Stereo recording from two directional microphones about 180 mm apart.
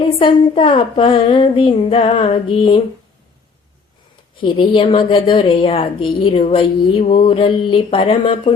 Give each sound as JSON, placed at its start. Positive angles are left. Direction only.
{"t": 0.0, "sound": "a woman's voice", "side_deg": 30}
{"t": 4.4, "sound": "a woman's voice", "side_deg": 30}